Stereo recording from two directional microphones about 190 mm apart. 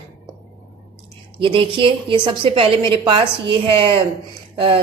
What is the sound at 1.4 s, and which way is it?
A woman's voice, 25° right (ahead or behind).